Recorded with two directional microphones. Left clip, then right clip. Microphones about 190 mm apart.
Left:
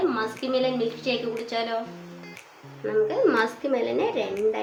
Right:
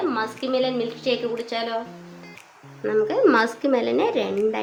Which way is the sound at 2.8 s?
45° right (ahead or behind).